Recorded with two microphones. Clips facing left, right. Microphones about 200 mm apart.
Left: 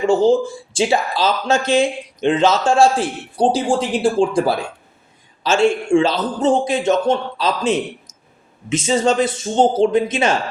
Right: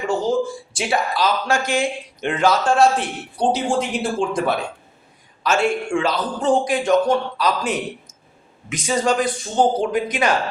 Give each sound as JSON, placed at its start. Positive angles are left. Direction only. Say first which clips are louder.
{"t": 0.1, "sound": "speech", "louder": "left 5 dB", "side_deg": 25}